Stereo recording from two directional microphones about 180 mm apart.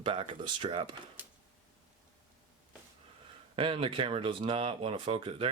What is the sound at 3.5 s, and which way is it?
Speech, 30° right (ahead or behind).